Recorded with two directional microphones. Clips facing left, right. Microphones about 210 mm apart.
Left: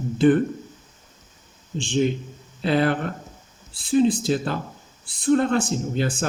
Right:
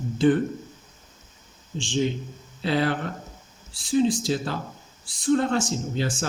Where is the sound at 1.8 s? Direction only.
60° left (ahead or behind).